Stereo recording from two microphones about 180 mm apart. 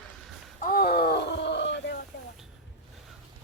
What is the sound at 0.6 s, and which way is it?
Groan, 55° left (ahead or behind).